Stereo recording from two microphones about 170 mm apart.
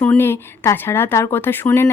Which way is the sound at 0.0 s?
10° left (ahead or behind).